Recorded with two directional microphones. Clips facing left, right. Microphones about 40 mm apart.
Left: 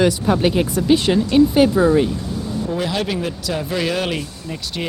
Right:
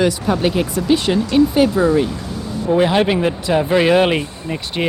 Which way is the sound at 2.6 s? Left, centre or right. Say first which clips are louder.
Right 9 dB; right.